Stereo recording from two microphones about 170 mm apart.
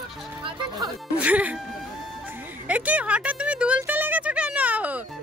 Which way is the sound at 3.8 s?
10° right (ahead or behind).